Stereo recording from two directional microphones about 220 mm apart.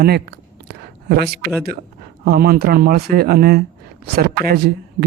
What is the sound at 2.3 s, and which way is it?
Speech, 45° right (ahead or behind).